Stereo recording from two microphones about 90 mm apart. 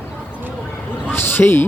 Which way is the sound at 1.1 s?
25° left (ahead or behind).